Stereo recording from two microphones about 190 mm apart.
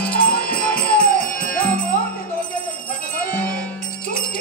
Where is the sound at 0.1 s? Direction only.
50° left (ahead or behind).